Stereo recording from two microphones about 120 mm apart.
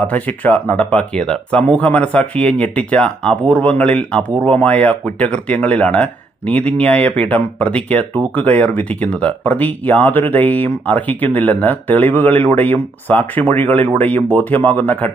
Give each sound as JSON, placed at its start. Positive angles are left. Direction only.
{"t": 0.1, "sound": "speech", "side_deg": 10}